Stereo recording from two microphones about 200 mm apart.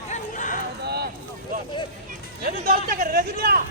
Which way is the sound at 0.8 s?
55° right (ahead or behind).